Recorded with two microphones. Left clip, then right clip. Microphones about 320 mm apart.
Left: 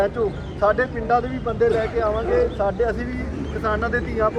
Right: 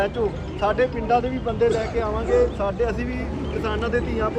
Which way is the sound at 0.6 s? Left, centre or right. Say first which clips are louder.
Left 2 dB; centre.